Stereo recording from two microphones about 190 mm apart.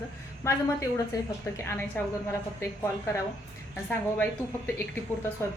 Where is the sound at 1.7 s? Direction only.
10° left (ahead or behind).